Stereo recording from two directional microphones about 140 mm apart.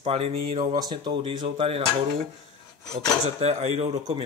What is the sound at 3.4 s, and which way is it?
Speech, 50° right (ahead or behind).